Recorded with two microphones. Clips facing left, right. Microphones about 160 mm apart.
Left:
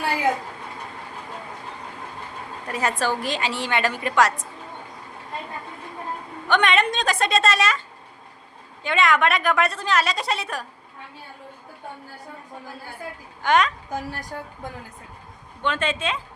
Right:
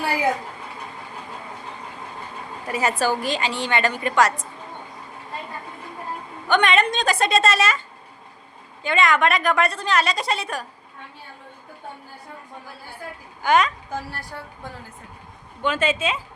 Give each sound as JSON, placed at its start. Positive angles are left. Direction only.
{"t": 2.6, "sound": "a woman's voice", "side_deg": -5}
{"t": 6.5, "sound": "a woman's voice", "side_deg": 0}
{"t": 8.8, "sound": "a woman's voice", "side_deg": 0}
{"t": 13.4, "sound": "a woman's voice", "side_deg": 0}
{"t": 13.9, "sound": "speech", "side_deg": 15}
{"t": 15.6, "sound": "a woman's voice", "side_deg": -5}